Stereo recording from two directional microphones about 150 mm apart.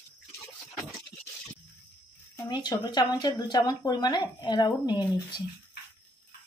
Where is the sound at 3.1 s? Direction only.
30° left (ahead or behind).